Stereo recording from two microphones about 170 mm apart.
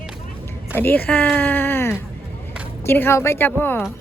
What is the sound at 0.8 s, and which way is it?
Speech, 10° left (ahead or behind).